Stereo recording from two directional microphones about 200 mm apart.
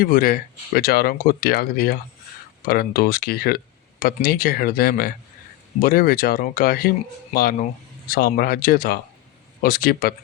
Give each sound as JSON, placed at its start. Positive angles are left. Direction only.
{"t": 0.0, "sound": "speech", "side_deg": 45}